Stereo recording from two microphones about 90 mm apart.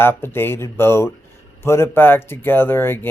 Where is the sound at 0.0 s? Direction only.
25° left (ahead or behind).